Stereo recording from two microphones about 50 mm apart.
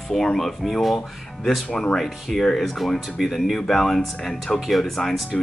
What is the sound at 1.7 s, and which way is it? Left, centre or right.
Speech, left.